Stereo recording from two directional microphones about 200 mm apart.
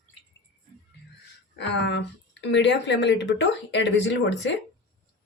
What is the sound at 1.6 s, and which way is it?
Speech, 60° left (ahead or behind).